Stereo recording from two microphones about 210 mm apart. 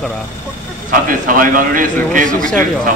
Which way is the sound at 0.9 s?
40° right (ahead or behind).